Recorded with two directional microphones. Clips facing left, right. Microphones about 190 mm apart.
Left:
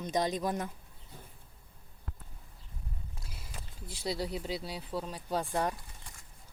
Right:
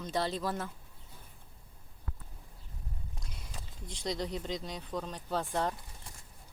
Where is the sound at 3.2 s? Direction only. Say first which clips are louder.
Even; 5° left (ahead or behind).